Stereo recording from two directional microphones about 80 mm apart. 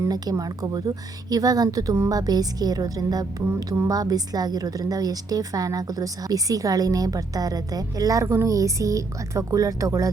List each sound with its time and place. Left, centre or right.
0.1 s a woman's voice: right